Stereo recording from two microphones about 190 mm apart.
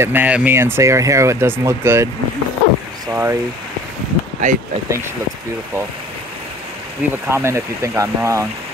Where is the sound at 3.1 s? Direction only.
10° right (ahead or behind).